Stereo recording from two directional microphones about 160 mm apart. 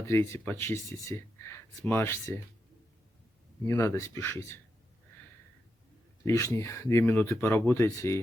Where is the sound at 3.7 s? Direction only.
20° left (ahead or behind).